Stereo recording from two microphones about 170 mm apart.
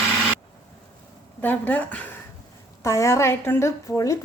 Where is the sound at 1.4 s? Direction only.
10° left (ahead or behind).